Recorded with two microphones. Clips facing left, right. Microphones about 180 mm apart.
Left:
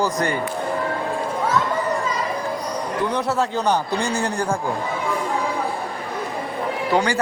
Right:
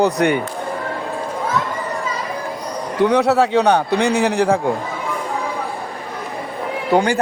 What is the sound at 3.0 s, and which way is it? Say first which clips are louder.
A man's voice: right 9 dB; 70° right (ahead or behind).